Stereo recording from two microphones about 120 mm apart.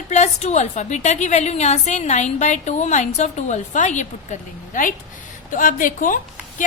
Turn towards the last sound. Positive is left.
turn(degrees=90)